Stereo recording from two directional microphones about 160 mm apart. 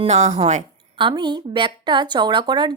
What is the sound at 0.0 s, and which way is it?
Speech, 45° right (ahead or behind).